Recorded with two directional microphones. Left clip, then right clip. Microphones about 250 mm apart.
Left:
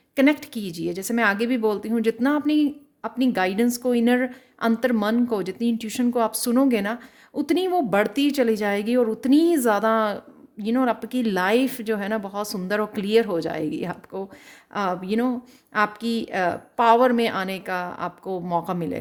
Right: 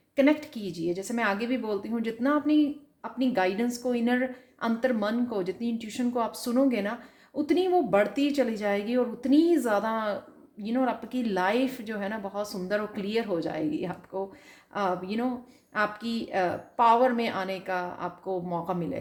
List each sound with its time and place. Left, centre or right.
0.2 s a woman's voice: left